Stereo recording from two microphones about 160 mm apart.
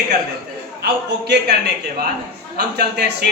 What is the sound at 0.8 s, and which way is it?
Speech, 90° right.